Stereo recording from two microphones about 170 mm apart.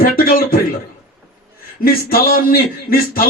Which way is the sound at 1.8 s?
60° left (ahead or behind).